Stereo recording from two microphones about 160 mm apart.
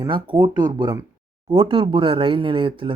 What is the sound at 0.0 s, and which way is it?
Speech, 30° right (ahead or behind).